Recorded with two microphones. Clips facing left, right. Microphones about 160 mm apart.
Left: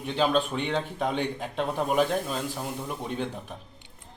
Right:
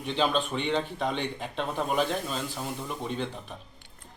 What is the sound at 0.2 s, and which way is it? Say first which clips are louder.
Speech: left 3 dB; 5° left (ahead or behind).